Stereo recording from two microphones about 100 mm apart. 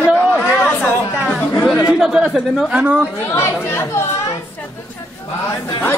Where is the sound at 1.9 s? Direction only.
5° right (ahead or behind).